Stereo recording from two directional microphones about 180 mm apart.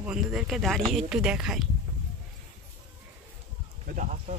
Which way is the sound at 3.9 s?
45° right (ahead or behind).